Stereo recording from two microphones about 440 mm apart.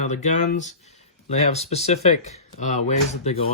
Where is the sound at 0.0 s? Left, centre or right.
Centre.